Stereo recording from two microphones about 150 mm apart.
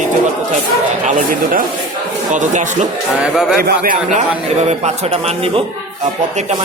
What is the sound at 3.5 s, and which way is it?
Speech, 75° right (ahead or behind).